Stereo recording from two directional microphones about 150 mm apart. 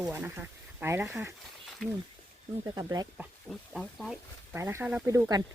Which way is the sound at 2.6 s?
25° right (ahead or behind).